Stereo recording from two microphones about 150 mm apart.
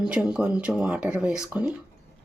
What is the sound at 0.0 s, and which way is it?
Speech, 5° right (ahead or behind).